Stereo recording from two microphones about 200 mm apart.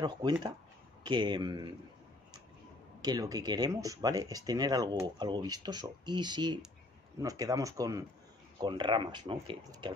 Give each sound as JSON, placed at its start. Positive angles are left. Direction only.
{"t": 0.0, "sound": "speech", "side_deg": -20}
{"t": 3.0, "sound": "speech", "side_deg": -20}